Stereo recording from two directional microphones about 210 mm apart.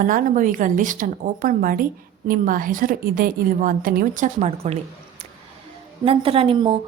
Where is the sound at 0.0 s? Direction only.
40° right (ahead or behind).